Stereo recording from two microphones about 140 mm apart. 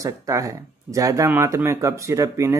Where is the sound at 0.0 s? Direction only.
25° right (ahead or behind).